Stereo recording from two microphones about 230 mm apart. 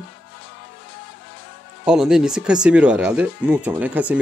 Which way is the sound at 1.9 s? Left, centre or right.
Centre.